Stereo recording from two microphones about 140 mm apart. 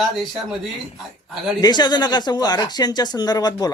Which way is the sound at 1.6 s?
30° left (ahead or behind).